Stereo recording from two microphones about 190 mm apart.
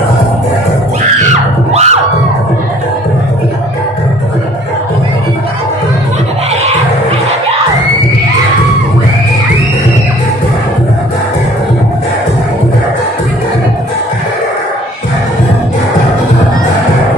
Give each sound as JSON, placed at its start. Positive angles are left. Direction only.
{"t": 1.7, "sound": "music", "side_deg": -35}